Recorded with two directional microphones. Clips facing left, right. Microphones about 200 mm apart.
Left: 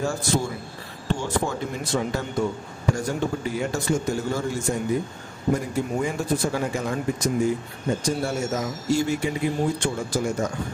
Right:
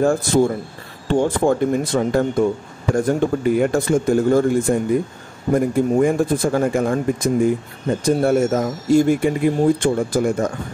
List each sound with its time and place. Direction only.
0.0 s speech: 55° right (ahead or behind)